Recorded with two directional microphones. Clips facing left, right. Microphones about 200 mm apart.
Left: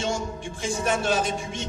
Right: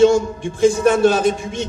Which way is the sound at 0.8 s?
60° right (ahead or behind).